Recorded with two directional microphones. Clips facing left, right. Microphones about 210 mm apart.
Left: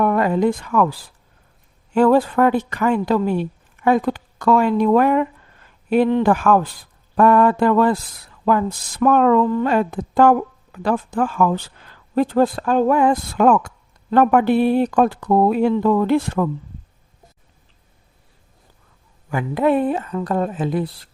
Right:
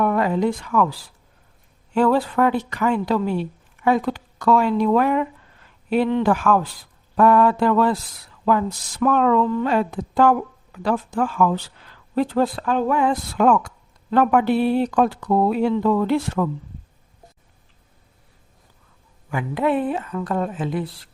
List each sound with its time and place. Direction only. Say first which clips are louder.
0.0 s speech: left 3 dB; 50° left (ahead or behind)
2.0 s speech: left 3 dB; 50° left (ahead or behind)
19.3 s speech: left 3 dB; 45° left (ahead or behind)